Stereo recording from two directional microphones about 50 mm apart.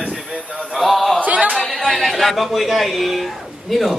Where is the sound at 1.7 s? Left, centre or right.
Centre.